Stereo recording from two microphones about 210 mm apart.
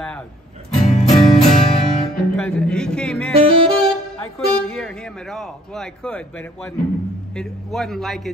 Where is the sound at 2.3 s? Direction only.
5° left (ahead or behind).